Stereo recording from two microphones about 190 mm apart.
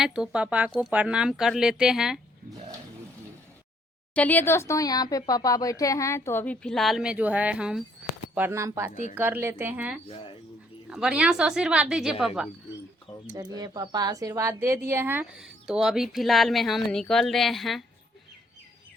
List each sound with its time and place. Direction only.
0.0 s speech: 5° right (ahead or behind)
4.1 s speech: 10° left (ahead or behind); by 8.9 s 15° right (ahead or behind)
8.9 s a woman's voice: 35° left (ahead or behind)
9.1 s speech: 10° right (ahead or behind)
10.1 s speech: 30° left (ahead or behind)
10.8 s speech: 5° right (ahead or behind)
13.6 s speech: 20° right (ahead or behind); by 17.8 s centre (ahead or behind)